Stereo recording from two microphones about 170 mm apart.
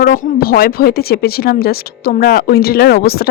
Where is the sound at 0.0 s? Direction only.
60° left (ahead or behind).